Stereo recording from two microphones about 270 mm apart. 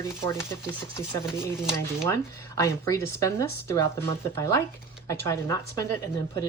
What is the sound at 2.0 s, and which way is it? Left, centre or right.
Speech, centre.